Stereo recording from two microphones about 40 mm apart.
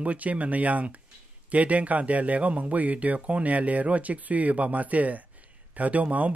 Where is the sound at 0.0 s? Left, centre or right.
Right.